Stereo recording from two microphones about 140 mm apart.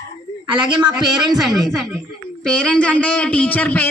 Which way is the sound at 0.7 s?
Centre (ahead or behind).